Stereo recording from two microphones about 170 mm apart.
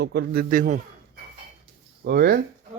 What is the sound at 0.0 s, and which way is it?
Speech, 80° right.